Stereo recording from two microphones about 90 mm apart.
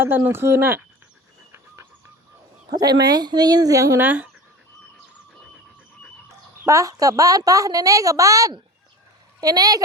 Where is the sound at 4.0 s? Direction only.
20° right (ahead or behind).